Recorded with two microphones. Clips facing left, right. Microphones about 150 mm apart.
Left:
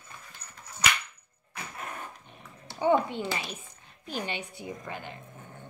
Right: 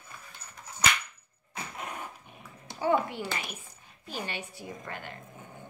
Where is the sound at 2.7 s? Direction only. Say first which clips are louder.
Left 3 dB; 20° left (ahead or behind).